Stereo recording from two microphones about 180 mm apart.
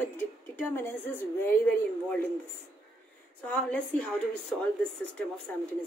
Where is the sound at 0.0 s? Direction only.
10° left (ahead or behind).